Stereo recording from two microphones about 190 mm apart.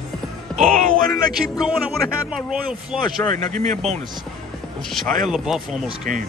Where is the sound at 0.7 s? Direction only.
45° right (ahead or behind).